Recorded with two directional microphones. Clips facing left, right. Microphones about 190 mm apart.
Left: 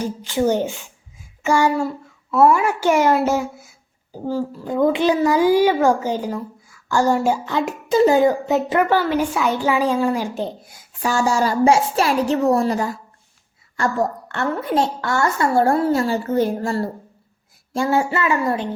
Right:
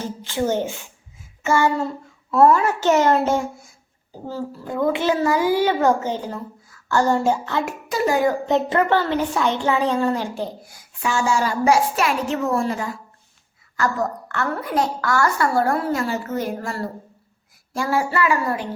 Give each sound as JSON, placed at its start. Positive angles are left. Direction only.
{"t": 0.0, "sound": "speech", "side_deg": 15}
{"t": 8.4, "sound": "speech", "side_deg": 10}
{"t": 10.4, "sound": "a woman's voice", "side_deg": 25}
{"t": 11.0, "sound": "a woman's voice", "side_deg": 40}
{"t": 13.7, "sound": "a woman's voice", "side_deg": 30}